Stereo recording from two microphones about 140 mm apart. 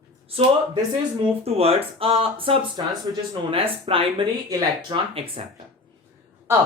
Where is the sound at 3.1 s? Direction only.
30° right (ahead or behind).